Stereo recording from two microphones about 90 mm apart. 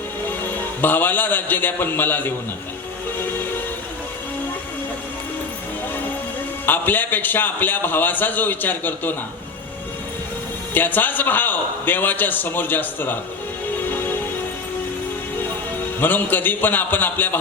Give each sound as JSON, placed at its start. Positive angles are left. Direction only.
{"t": 0.5, "sound": "a man's voice", "side_deg": 20}
{"t": 6.7, "sound": "a man's voice", "side_deg": 20}
{"t": 10.8, "sound": "a man's voice", "side_deg": 20}
{"t": 16.0, "sound": "a man's voice", "side_deg": 20}